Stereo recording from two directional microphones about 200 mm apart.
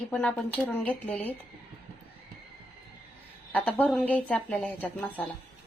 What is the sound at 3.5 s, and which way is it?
A woman's voice, 10° left (ahead or behind).